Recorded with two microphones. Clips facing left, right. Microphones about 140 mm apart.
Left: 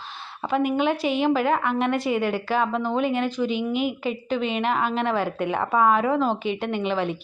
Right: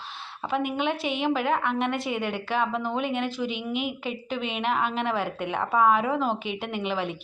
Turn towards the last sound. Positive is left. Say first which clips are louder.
# left 4 dB
turn(degrees=0)  # may be behind; listen again after turning